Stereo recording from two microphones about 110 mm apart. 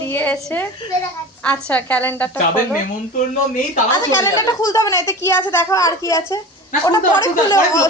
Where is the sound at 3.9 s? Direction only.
25° left (ahead or behind).